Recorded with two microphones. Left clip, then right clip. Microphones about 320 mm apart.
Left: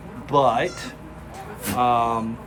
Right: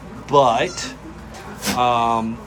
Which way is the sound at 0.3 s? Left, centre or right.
Centre.